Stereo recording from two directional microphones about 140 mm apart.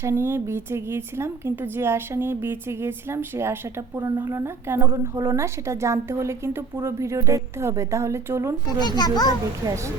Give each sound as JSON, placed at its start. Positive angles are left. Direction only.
{"t": 0.0, "sound": "speech", "side_deg": -20}
{"t": 8.8, "sound": "a child's voice", "side_deg": 30}
{"t": 9.6, "sound": "speech", "side_deg": -20}